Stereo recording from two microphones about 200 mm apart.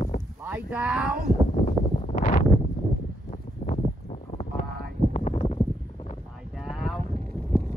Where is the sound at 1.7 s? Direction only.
40° left (ahead or behind).